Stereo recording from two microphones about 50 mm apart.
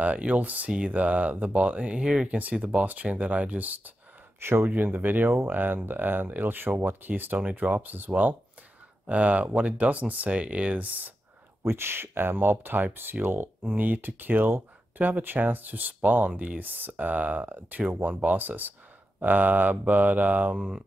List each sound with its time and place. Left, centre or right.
0.0 s speech: right
2.2 s speech: right
4.4 s speech: right
4.6 s speech: right
7.8 s speech: right
11.6 s speech: right